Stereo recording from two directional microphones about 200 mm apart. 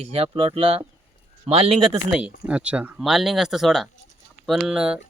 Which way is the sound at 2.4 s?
5° right (ahead or behind).